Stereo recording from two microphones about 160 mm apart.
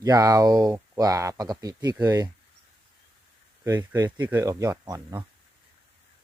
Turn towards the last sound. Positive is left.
turn(degrees=-20)  # may be behind; listen again after turning